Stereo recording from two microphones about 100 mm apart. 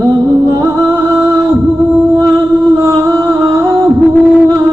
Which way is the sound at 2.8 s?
35° right (ahead or behind).